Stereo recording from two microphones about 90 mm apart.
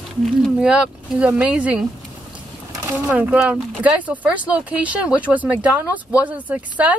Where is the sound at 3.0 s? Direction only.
15° right (ahead or behind).